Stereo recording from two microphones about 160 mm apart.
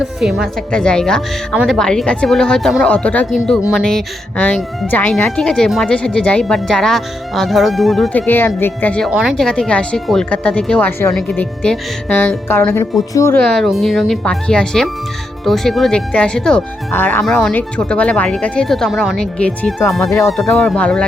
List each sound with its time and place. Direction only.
0.0 s speech: 5° right (ahead or behind)
8.3 s speech: 15° left (ahead or behind)
9.0 s speech: 5° right (ahead or behind); by 13.4 s 15° left (ahead or behind)
13.4 s speech: centre (ahead or behind)
20.0 s speech: 20° left (ahead or behind)
20.3 s speech: centre (ahead or behind)